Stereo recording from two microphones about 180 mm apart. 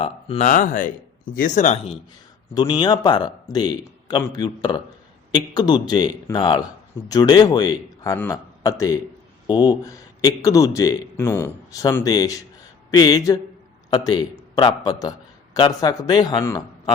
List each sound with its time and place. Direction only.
0.0 s speech: 35° left (ahead or behind)
2.6 s a man's voice: 25° left (ahead or behind)